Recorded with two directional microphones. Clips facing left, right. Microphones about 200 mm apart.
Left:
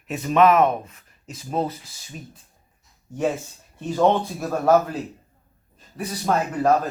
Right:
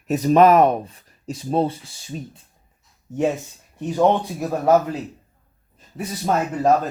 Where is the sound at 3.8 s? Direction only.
15° right (ahead or behind).